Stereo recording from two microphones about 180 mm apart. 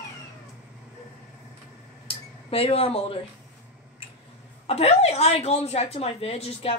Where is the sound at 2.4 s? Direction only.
30° left (ahead or behind).